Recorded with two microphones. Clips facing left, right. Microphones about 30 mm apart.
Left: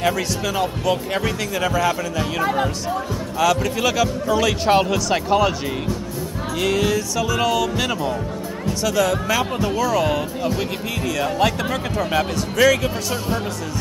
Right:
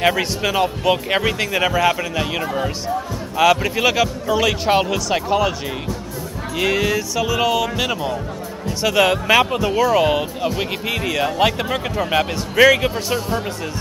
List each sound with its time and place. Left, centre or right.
0.0 s speech: right; by 5.5 s centre
6.5 s speech: centre
8.8 s speech: right